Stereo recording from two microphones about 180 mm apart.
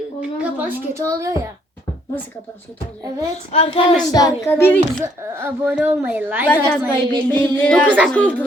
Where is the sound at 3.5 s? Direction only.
35° left (ahead or behind).